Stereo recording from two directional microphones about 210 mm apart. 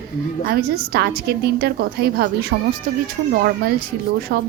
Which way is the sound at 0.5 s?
50° right (ahead or behind).